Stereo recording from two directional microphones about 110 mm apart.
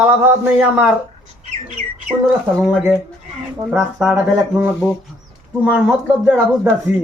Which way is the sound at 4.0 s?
5° right (ahead or behind).